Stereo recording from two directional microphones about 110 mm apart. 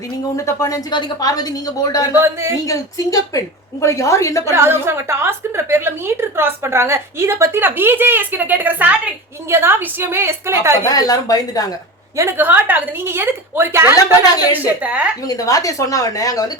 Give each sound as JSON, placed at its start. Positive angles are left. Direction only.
{"t": 0.3, "sound": "speech", "side_deg": 30}
{"t": 2.1, "sound": "a woman's voice", "side_deg": -25}
{"t": 2.6, "sound": "a woman's voice", "side_deg": 30}
{"t": 4.5, "sound": "a woman's voice", "side_deg": -20}
{"t": 10.8, "sound": "speech", "side_deg": 35}
{"t": 12.1, "sound": "a woman's voice", "side_deg": -25}
{"t": 15.3, "sound": "speech", "side_deg": 30}